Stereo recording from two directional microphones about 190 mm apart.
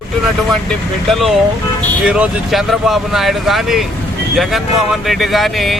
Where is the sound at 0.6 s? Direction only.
Centre (ahead or behind).